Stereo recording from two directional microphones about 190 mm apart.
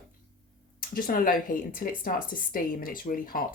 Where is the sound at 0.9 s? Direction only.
50° left (ahead or behind).